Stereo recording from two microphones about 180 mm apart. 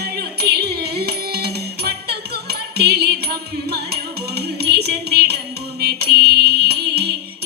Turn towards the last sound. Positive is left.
turn(degrees=-65)  # may be behind; listen again after turning